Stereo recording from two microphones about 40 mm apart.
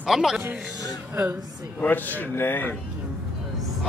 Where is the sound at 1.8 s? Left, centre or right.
Left.